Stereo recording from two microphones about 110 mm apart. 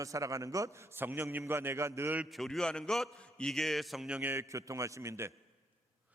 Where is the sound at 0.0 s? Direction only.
30° right (ahead or behind).